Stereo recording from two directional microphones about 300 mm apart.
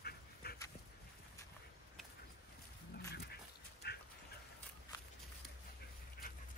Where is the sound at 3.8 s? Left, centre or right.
Left.